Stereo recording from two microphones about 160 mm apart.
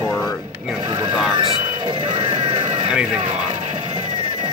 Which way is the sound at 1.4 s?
30° right (ahead or behind).